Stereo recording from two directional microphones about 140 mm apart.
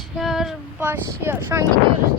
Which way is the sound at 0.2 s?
Centre (ahead or behind).